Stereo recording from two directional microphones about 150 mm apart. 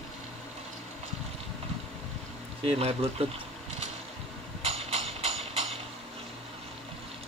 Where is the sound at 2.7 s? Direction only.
45° right (ahead or behind).